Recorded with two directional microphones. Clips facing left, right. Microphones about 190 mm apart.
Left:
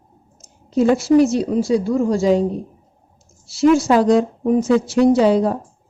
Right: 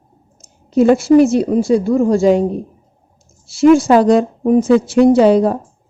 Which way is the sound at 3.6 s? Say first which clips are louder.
Right 4 dB; 55° right (ahead or behind).